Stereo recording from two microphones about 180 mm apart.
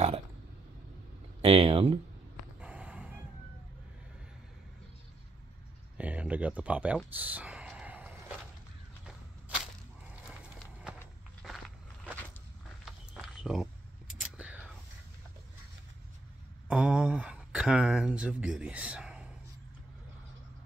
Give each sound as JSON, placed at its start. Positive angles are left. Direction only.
{"t": 1.4, "sound": "speech", "side_deg": -35}
{"t": 2.6, "sound": "dog", "side_deg": -5}
{"t": 5.9, "sound": "speech", "side_deg": -5}
{"t": 7.2, "sound": "whispering", "side_deg": -10}
{"t": 10.4, "sound": "horse", "side_deg": -5}
{"t": 11.4, "sound": "biting", "side_deg": 0}
{"t": 12.8, "sound": "a sound", "side_deg": -5}
{"t": 14.2, "sound": "whispering", "side_deg": -5}
{"t": 16.6, "sound": "speech", "side_deg": -5}